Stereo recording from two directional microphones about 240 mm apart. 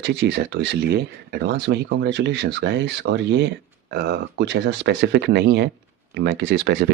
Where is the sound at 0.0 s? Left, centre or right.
Right.